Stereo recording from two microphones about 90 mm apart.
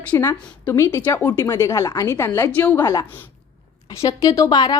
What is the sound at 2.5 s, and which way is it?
Speech, 15° left (ahead or behind).